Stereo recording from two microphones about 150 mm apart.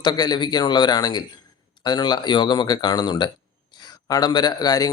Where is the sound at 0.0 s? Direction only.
30° left (ahead or behind).